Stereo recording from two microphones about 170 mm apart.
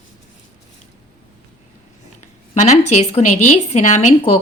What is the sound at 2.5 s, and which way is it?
A woman's voice, 45° left (ahead or behind).